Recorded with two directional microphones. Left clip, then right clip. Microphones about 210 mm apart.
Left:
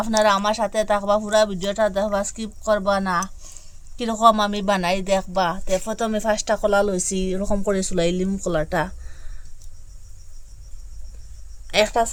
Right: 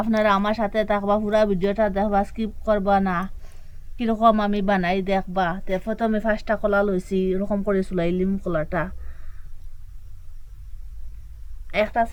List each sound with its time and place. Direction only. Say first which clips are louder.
0.0 s speech: left 2 dB; 35° left (ahead or behind)
11.7 s speech: left 3 dB; 40° left (ahead or behind)